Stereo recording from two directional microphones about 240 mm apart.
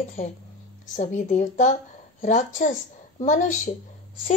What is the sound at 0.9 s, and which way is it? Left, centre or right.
A woman's voice, left.